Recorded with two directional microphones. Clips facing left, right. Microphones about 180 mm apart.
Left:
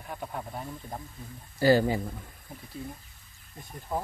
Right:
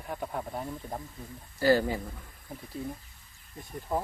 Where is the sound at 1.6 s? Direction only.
20° left (ahead or behind).